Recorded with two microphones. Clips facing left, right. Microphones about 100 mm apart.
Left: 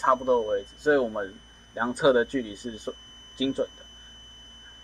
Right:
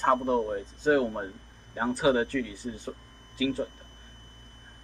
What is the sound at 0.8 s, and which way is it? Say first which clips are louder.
Speech: left 1 dB; 20° left (ahead or behind).